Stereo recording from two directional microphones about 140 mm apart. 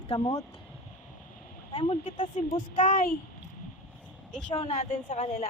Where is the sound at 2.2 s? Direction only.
40° left (ahead or behind).